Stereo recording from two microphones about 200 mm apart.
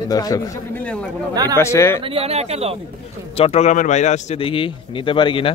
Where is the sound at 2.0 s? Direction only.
30° right (ahead or behind).